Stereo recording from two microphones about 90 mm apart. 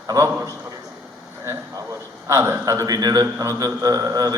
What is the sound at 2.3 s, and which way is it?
A man's voice, 35° right (ahead or behind).